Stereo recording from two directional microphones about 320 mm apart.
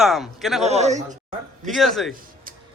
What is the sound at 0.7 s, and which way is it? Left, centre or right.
Speech, right.